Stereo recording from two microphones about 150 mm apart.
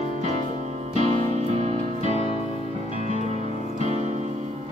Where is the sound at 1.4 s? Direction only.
50° right (ahead or behind).